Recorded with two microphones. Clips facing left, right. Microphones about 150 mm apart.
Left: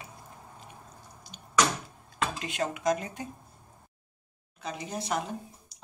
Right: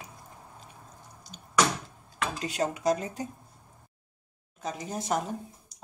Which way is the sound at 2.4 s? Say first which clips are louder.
Right 3 dB; 40° right (ahead or behind).